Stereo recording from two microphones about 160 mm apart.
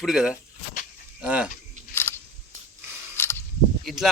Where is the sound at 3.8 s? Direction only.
Centre (ahead or behind).